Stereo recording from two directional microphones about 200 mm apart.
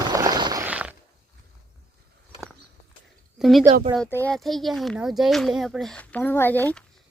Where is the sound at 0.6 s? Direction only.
5° right (ahead or behind).